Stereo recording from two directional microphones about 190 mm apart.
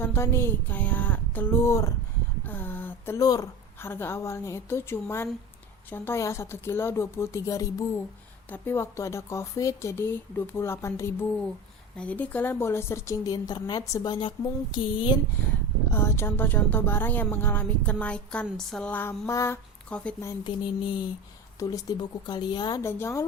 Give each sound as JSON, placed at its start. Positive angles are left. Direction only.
{"t": 0.0, "sound": "a woman's voice", "side_deg": 15}
{"t": 15.9, "sound": "speech", "side_deg": 15}
{"t": 21.6, "sound": "a woman's voice", "side_deg": 20}